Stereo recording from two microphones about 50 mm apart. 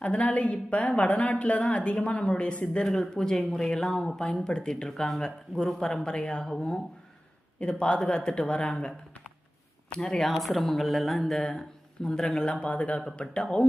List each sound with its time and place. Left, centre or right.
0.0 s a woman's voice: left
2.8 s a man's voice: centre
7.6 s a woman's voice: left
10.2 s a man's voice: centre